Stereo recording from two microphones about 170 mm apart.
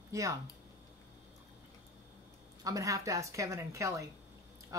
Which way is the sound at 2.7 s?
20° right (ahead or behind).